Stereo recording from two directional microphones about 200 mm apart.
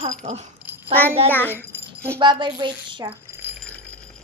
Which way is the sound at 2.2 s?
25° right (ahead or behind).